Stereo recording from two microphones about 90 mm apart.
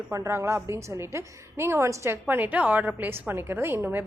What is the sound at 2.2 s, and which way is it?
Speech, 20° right (ahead or behind).